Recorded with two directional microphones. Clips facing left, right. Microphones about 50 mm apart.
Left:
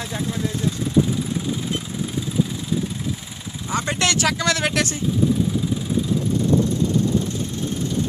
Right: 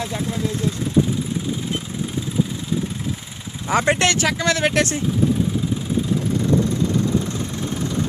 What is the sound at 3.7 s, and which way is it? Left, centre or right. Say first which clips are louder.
Speech: right 6 dB; right.